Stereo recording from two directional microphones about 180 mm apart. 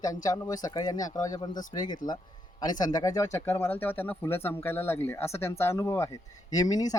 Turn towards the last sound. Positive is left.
turn(degrees=20)  # may be behind; listen again after turning